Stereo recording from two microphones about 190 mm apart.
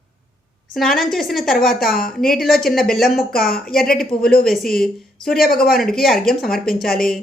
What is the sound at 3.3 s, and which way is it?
Speech, 50° left (ahead or behind).